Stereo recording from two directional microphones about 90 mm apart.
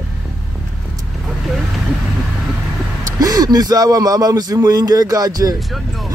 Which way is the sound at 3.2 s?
45° right (ahead or behind).